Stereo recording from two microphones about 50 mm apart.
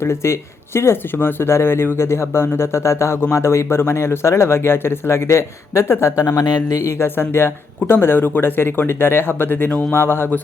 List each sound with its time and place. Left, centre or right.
0.0 s speech: left
7.2 s speech: left